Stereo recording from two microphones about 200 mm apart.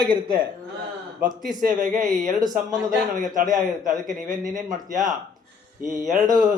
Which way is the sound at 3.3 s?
40° right (ahead or behind).